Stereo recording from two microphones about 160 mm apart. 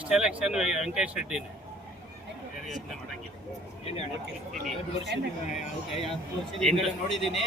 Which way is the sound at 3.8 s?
40° left (ahead or behind).